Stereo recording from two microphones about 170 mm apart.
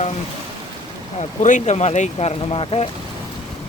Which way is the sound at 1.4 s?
45° left (ahead or behind).